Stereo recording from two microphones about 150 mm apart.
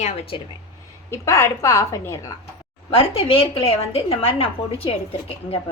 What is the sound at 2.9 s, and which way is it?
A woman's voice, 40° left (ahead or behind).